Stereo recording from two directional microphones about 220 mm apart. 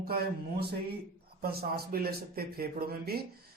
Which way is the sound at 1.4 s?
45° right (ahead or behind).